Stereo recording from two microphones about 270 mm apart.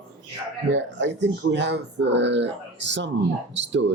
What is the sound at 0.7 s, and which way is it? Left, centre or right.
Speech, right.